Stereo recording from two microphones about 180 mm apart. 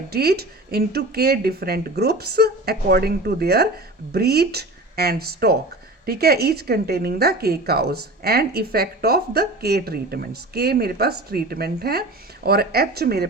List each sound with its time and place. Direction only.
0.1 s a woman's voice: 60° right (ahead or behind)